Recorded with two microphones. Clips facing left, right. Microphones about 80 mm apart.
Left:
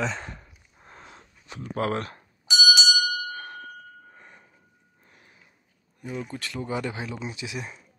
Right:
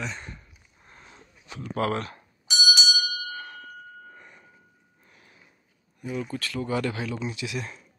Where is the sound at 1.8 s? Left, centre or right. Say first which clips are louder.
Even; left.